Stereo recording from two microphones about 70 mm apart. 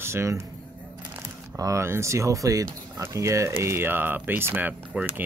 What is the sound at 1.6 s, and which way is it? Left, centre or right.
Speech, right.